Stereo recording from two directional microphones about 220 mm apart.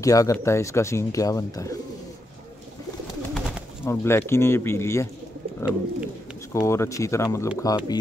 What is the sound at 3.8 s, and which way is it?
Speech, 10° left (ahead or behind).